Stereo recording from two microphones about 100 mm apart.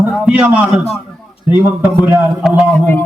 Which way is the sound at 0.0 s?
15° right (ahead or behind).